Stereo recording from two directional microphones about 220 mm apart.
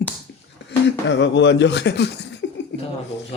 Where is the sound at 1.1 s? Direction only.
55° left (ahead or behind).